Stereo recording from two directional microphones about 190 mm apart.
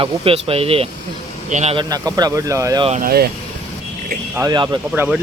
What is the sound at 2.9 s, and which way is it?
Speech, 50° right (ahead or behind).